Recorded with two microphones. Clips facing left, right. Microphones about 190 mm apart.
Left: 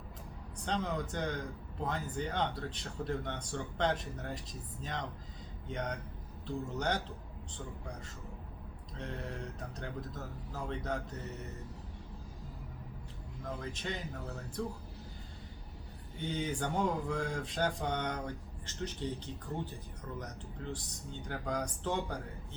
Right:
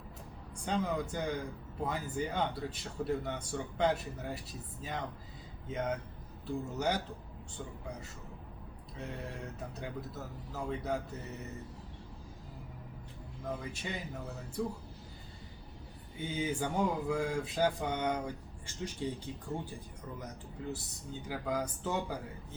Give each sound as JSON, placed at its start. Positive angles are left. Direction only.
{"t": 0.5, "sound": "speech", "side_deg": -10}
{"t": 10.7, "sound": "speech", "side_deg": -5}
{"t": 13.6, "sound": "speech", "side_deg": -10}
{"t": 16.1, "sound": "speech", "side_deg": -5}